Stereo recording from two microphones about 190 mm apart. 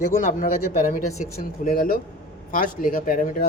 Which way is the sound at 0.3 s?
45° left (ahead or behind).